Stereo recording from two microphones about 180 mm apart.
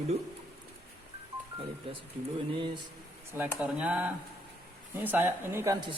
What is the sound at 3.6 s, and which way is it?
Speech, 5° right (ahead or behind).